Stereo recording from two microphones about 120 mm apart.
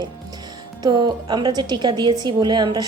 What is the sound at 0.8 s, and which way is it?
A woman's voice, 35° right (ahead or behind).